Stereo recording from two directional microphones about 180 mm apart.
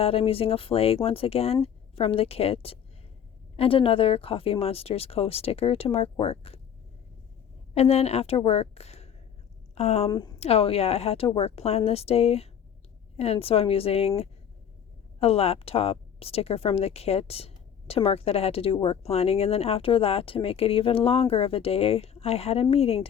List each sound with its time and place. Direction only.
0.0 s a woman's voice: 30° left (ahead or behind)
7.7 s a woman's voice: 35° left (ahead or behind)
10.1 s a woman's voice: 20° left (ahead or behind)
10.4 s a woman's voice: 35° left (ahead or behind)
15.2 s a woman's voice: 35° left (ahead or behind)